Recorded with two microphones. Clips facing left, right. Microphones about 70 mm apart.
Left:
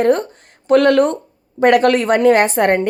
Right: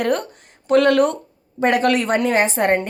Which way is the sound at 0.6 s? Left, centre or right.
Left.